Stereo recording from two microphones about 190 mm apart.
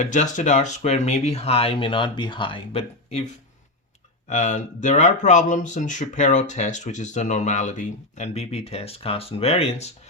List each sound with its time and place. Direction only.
0.0 s speech: 40° left (ahead or behind)
4.3 s speech: 40° left (ahead or behind)